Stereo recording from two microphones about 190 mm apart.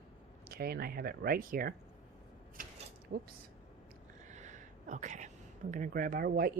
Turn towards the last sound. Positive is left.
turn(degrees=-55)  # may be behind; listen again after turning